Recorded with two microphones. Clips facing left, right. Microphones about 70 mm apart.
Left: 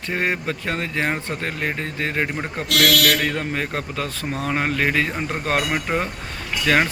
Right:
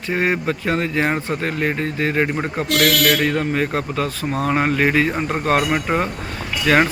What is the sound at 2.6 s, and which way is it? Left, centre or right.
Speech, right.